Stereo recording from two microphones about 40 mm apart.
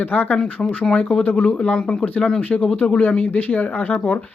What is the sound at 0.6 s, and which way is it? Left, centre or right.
Speech, centre.